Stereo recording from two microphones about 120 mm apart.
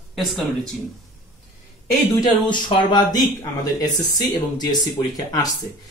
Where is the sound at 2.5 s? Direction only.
40° left (ahead or behind).